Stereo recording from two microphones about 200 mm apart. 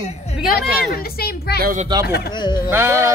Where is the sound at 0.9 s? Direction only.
50° left (ahead or behind).